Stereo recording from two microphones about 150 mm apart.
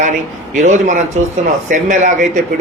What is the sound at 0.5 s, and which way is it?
A man's voice, 55° right (ahead or behind).